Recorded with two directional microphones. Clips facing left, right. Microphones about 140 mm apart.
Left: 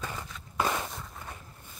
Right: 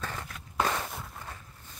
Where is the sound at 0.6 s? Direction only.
10° left (ahead or behind).